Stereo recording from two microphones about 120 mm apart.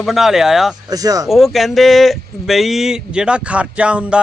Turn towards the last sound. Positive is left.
turn(degrees=-10)  # may be behind; listen again after turning